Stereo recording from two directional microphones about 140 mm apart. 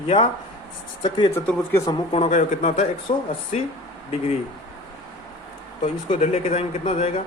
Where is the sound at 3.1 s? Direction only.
45° left (ahead or behind).